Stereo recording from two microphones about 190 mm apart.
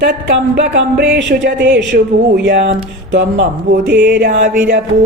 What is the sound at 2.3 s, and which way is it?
Music, 65° right (ahead or behind).